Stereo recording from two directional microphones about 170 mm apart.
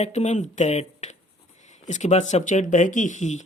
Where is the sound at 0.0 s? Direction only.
45° left (ahead or behind).